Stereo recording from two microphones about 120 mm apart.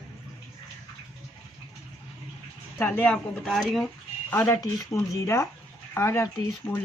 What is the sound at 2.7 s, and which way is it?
Speech, 15° left (ahead or behind).